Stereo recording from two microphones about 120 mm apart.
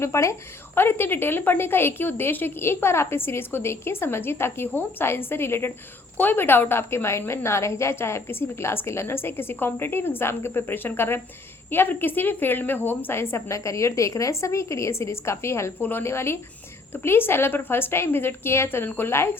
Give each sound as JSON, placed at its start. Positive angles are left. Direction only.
{"t": 0.0, "sound": "a woman's voice", "side_deg": 25}